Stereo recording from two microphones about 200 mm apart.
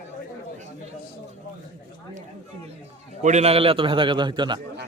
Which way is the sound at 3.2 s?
35° right (ahead or behind).